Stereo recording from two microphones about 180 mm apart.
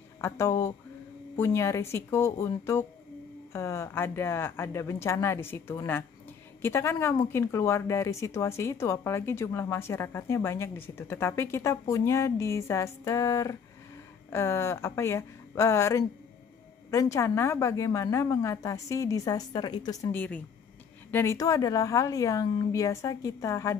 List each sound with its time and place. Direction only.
0.2 s speech: 15° left (ahead or behind)